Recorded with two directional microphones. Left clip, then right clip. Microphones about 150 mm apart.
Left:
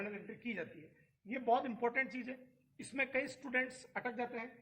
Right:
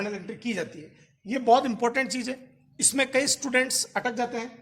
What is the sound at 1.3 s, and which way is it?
A woman's voice, 45° right (ahead or behind).